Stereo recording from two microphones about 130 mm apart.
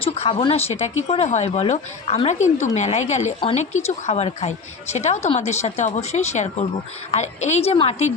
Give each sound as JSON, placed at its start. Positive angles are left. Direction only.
{"t": 0.0, "sound": "speech", "side_deg": 45}
{"t": 0.7, "sound": "a woman's voice", "side_deg": 55}